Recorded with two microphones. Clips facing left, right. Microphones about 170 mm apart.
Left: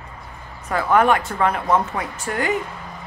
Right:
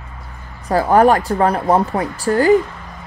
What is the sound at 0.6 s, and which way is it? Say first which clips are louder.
Speech: right 5 dB; 35° right (ahead or behind).